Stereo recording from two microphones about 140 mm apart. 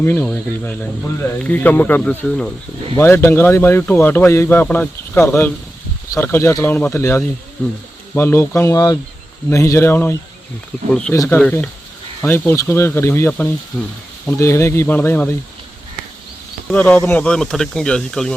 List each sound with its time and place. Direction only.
0.0 s speech: 15° left (ahead or behind)
11.3 s speech: 10° left (ahead or behind)
16.7 s speech: 10° left (ahead or behind)